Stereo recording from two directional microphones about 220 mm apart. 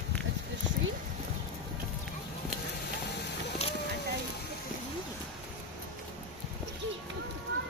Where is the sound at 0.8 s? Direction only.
60° right (ahead or behind).